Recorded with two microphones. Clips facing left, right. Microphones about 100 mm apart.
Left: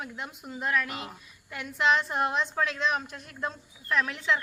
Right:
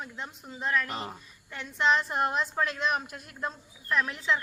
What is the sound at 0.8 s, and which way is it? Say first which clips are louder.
Speech: right 2 dB; 35° right (ahead or behind).